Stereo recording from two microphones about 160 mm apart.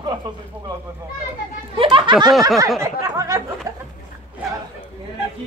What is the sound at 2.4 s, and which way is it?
Speech, 20° right (ahead or behind).